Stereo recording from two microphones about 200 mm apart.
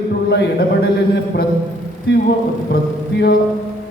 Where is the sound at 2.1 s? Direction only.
55° left (ahead or behind).